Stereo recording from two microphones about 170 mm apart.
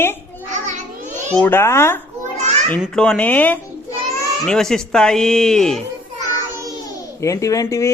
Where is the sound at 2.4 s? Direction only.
40° right (ahead or behind).